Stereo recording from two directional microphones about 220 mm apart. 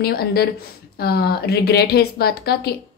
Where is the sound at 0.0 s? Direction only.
45° left (ahead or behind).